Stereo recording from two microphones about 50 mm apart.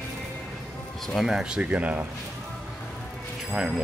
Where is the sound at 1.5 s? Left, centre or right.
Right.